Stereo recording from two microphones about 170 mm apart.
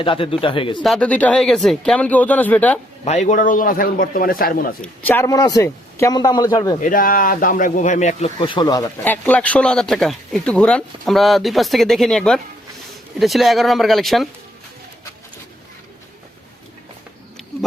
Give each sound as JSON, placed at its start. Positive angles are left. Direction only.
{"t": 0.0, "sound": "speech", "side_deg": 30}
{"t": 0.8, "sound": "speech", "side_deg": 5}
{"t": 3.0, "sound": "a man's voice", "side_deg": 40}
{"t": 4.8, "sound": "a man's voice", "side_deg": 10}
{"t": 6.8, "sound": "speech", "side_deg": 55}
{"t": 8.4, "sound": "a man's voice", "side_deg": 30}
{"t": 9.0, "sound": "speech", "side_deg": 10}